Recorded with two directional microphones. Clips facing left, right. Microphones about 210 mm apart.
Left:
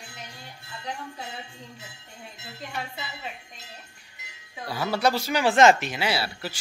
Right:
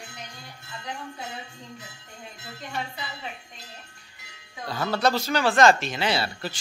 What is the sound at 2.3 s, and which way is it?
Music, 25° left (ahead or behind).